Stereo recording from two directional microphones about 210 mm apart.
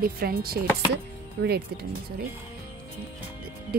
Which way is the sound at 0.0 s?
45° right (ahead or behind).